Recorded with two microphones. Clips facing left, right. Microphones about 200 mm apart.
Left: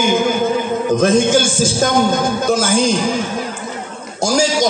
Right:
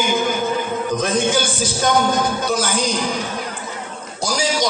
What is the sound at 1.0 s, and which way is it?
Speech, 45° left (ahead or behind).